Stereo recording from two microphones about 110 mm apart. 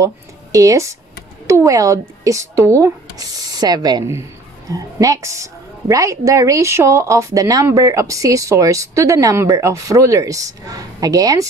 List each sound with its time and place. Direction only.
0.0 s a woman's voice: 30° right (ahead or behind)